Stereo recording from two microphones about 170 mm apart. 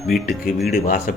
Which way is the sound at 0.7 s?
60° left (ahead or behind).